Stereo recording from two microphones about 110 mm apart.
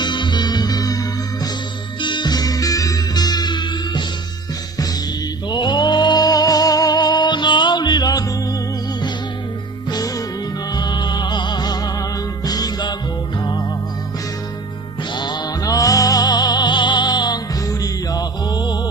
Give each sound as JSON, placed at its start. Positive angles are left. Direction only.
{"t": 0.0, "sound": "music", "side_deg": 45}
{"t": 2.0, "sound": "music", "side_deg": 45}
{"t": 5.5, "sound": "music", "side_deg": 40}
{"t": 9.9, "sound": "music", "side_deg": 35}
{"t": 15.1, "sound": "music", "side_deg": 40}